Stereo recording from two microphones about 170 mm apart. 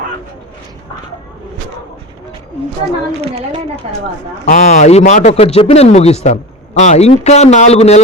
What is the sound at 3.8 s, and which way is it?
Speech, 45° right (ahead or behind).